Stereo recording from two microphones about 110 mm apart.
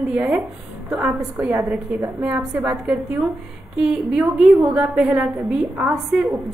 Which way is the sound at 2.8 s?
5° right (ahead or behind).